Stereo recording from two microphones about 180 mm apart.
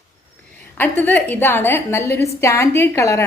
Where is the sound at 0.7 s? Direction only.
10° left (ahead or behind).